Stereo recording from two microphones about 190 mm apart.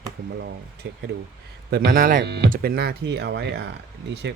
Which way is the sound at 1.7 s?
50° right (ahead or behind).